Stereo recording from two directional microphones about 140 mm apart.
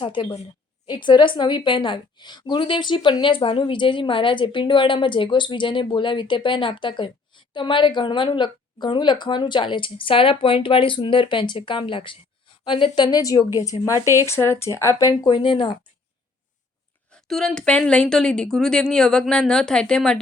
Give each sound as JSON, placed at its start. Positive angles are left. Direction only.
{"t": 0.0, "sound": "a woman's voice", "side_deg": 35}
{"t": 15.2, "sound": "a woman's voice", "side_deg": 35}
{"t": 17.1, "sound": "a woman's voice", "side_deg": 5}